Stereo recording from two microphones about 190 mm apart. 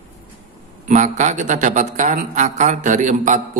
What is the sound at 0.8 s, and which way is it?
A man's voice, 40° right (ahead or behind).